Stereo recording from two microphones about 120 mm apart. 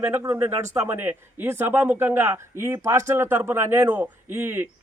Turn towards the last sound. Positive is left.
turn(degrees=-20)  # may be behind; listen again after turning